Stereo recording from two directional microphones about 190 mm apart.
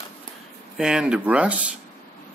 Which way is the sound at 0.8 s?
5° right (ahead or behind).